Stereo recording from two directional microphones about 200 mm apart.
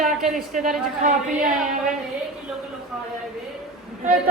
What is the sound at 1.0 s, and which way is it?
Speech, 40° right (ahead or behind).